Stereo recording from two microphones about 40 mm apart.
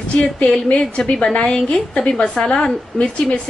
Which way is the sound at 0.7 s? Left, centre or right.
Left.